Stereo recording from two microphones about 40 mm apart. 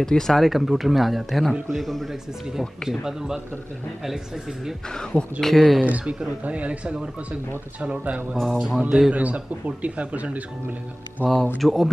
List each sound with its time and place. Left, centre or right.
0.0 s speech: centre
0.5 s speech: centre
2.8 s speech: centre
4.8 s speech: centre
5.9 s speech: right
8.5 s speech: centre
9.1 s speech: right
11.6 s speech: centre